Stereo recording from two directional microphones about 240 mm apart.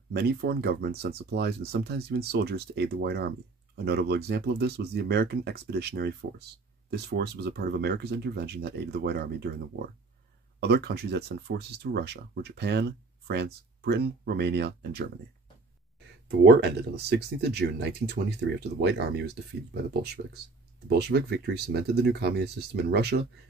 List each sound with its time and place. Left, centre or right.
0.1 s speech: right
16.4 s speech: right